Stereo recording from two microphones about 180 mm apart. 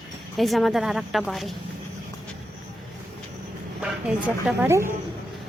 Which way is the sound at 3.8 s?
5° right (ahead or behind).